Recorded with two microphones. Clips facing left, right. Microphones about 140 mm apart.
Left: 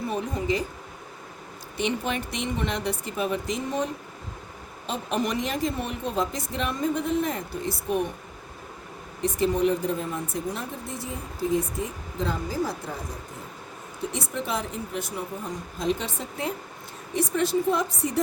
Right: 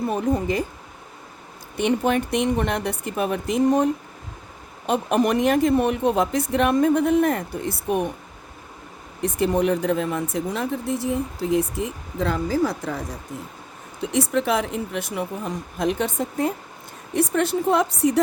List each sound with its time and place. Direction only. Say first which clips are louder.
0.1 s speech: right 3 dB; 55° right (ahead or behind)
1.7 s speech: right 7 dB; 55° right (ahead or behind)
4.9 s speech: right 7 dB; 55° right (ahead or behind)
9.2 s speech: right 2 dB; 60° right (ahead or behind); by 12.9 s 85° right
14.1 s a woman's voice: right 10 dB; 75° right (ahead or behind)